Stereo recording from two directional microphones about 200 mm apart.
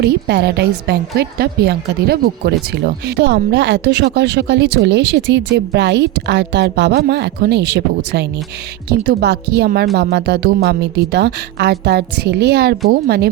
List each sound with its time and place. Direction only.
0.0 s a woman's voice: 55° right (ahead or behind)